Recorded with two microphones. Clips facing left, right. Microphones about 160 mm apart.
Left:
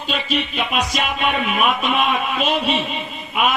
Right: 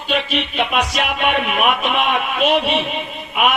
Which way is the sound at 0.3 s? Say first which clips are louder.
Even; 65° right (ahead or behind).